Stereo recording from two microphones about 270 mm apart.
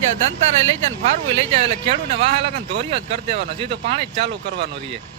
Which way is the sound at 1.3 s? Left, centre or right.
Right.